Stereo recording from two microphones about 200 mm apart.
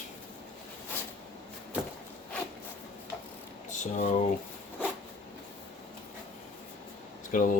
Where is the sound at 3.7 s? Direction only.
40° left (ahead or behind).